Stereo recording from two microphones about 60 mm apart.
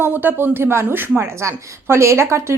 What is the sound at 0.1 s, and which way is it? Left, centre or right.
A woman's voice, right.